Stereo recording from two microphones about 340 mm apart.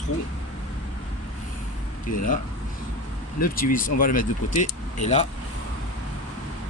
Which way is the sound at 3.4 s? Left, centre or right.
Left.